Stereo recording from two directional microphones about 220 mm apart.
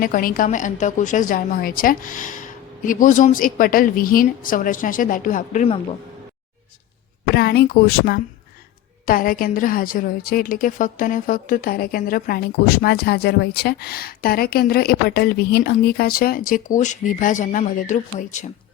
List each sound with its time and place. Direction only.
0.0 s a woman's voice: 40° left (ahead or behind)
7.3 s a woman's voice: 45° left (ahead or behind)